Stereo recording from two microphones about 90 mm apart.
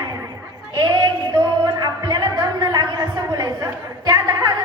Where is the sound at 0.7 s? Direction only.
50° right (ahead or behind).